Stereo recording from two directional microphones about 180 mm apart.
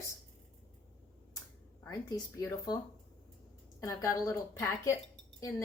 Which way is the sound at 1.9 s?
20° left (ahead or behind).